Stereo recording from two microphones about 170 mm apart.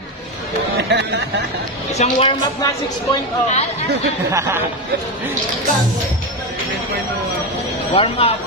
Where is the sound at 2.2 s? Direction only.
25° left (ahead or behind).